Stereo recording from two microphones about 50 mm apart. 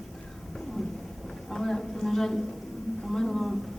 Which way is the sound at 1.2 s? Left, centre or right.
Centre.